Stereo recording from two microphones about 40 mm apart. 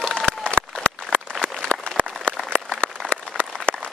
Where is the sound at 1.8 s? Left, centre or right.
Right.